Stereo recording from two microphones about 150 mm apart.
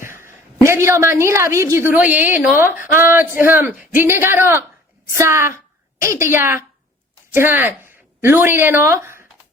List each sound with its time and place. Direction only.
0.0 s a woman's voice: 15° right (ahead or behind)